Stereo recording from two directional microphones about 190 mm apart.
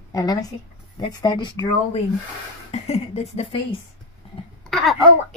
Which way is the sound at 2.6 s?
35° left (ahead or behind).